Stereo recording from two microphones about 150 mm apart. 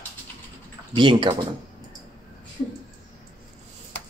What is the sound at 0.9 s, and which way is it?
Speech, 30° right (ahead or behind).